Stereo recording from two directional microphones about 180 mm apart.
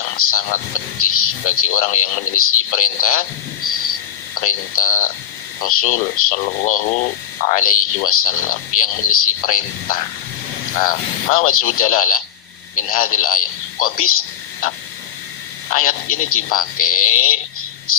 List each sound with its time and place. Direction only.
0.2 s speech: 50° left (ahead or behind)
4.4 s speech: 50° left (ahead or behind)
11.3 s a man's voice: 50° left (ahead or behind)
15.7 s speech: 50° left (ahead or behind)